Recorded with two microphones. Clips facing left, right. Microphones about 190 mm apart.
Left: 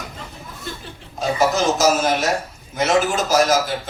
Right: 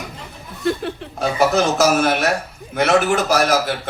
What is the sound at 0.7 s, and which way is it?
A man's voice, 65° right (ahead or behind).